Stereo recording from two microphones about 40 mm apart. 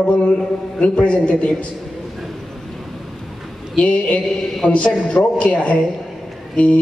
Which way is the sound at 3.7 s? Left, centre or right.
Left.